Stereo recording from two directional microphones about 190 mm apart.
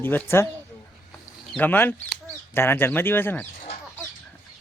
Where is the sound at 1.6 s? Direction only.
10° left (ahead or behind).